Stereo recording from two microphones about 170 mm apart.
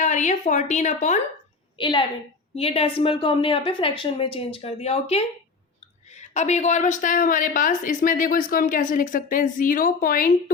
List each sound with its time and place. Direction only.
0.0 s a woman's voice: 45° left (ahead or behind)
1.8 s a woman's voice: 25° left (ahead or behind); by 10.3 s 55° left (ahead or behind)